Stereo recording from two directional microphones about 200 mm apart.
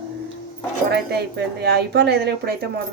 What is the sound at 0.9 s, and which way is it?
Speech, 55° right (ahead or behind).